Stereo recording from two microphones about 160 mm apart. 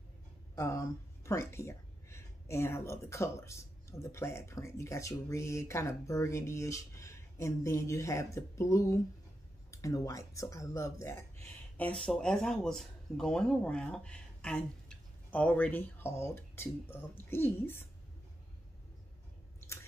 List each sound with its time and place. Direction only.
0.6 s speech: 20° left (ahead or behind)